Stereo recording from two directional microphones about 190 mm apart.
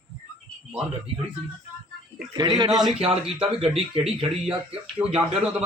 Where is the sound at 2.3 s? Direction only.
25° right (ahead or behind).